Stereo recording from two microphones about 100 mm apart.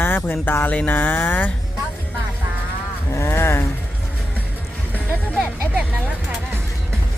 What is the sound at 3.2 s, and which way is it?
Vehicle, 25° left (ahead or behind).